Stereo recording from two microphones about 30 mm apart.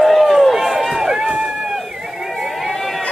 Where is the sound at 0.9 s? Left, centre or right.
Centre.